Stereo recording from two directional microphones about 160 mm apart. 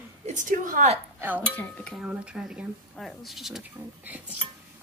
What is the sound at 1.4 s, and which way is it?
Speech, 5° left (ahead or behind).